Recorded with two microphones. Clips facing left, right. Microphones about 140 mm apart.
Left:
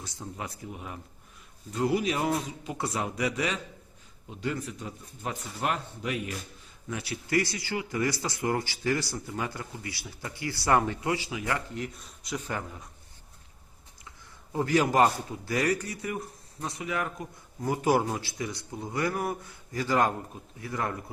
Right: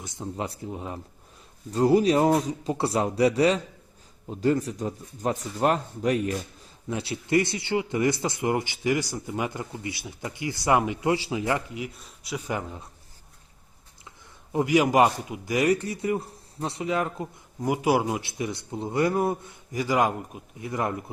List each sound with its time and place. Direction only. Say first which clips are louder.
0.0 s speech: right 6 dB; 20° right (ahead or behind); by 6.3 s 40° right (ahead or behind)
6.8 s speech: right 5 dB; 25° right (ahead or behind)
11.0 s speech: right 5 dB; 30° right (ahead or behind)
11.7 s speech: right 1 dB; 5° right (ahead or behind)
14.5 s speech: right 4 dB; 15° right (ahead or behind)
17.6 s speech: right 2 dB; 10° right (ahead or behind)